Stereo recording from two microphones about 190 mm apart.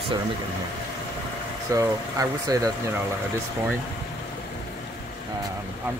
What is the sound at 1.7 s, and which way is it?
Speech, 15° right (ahead or behind).